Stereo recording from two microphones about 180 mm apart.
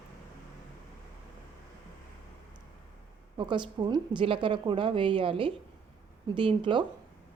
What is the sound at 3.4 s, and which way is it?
A woman's voice, 25° right (ahead or behind).